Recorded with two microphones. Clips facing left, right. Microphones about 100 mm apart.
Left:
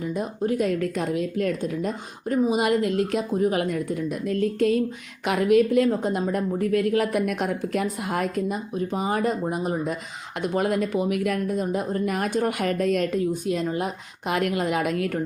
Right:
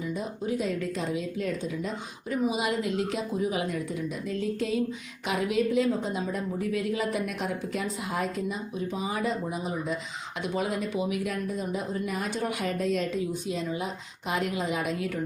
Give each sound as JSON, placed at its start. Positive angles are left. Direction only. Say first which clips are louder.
{"t": 0.0, "sound": "a woman's voice", "louder": "left 5 dB", "side_deg": 55}